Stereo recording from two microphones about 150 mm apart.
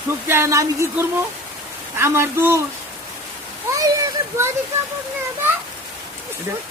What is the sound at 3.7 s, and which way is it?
Children playing, 20° right (ahead or behind).